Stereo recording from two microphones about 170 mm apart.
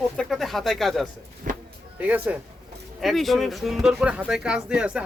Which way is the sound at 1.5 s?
50° right (ahead or behind).